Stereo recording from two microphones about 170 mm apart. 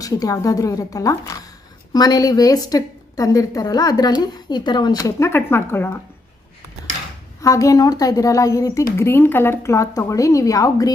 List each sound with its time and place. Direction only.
0.0 s a woman's voice: 20° left (ahead or behind)
7.4 s a woman's voice: 20° left (ahead or behind)